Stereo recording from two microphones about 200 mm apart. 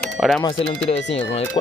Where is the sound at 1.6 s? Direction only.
25° left (ahead or behind).